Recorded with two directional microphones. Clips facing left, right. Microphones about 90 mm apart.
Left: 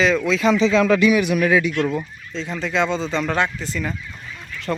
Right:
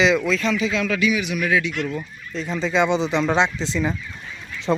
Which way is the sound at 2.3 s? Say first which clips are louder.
Right 2 dB; 15° right (ahead or behind).